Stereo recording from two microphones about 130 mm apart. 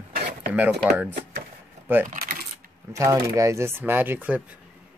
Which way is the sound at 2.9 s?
25° right (ahead or behind).